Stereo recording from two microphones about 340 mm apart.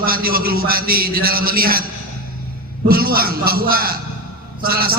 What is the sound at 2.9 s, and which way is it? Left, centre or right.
A man's voice, right.